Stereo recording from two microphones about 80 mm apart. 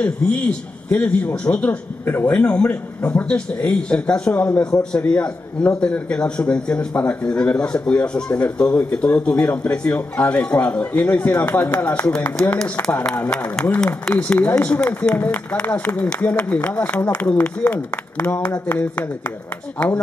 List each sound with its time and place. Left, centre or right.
0.0 s a man's voice: centre